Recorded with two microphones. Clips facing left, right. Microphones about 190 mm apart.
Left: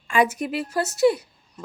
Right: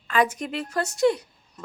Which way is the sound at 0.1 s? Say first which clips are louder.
Left 2 dB; 10° left (ahead or behind).